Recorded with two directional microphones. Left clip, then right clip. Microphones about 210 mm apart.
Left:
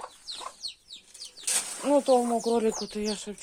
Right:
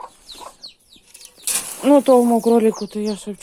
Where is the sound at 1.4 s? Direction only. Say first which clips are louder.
Right 10 dB; 40° right (ahead or behind).